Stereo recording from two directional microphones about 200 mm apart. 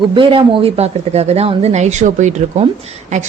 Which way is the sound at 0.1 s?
25° right (ahead or behind).